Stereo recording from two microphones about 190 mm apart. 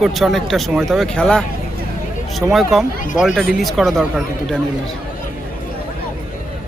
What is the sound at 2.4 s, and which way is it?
Speech, 5° right (ahead or behind).